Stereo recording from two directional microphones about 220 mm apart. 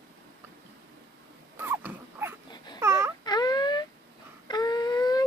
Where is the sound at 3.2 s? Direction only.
20° left (ahead or behind).